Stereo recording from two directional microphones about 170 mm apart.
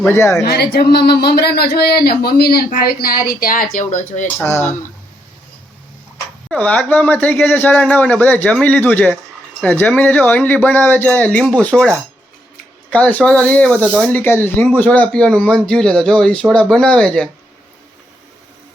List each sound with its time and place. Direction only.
0.0 s speech: 15° left (ahead or behind)
0.4 s speech: 70° left (ahead or behind)
2.6 s speech: 55° left (ahead or behind)
4.4 s speech: 15° left (ahead or behind)
6.5 s speech: 10° left (ahead or behind)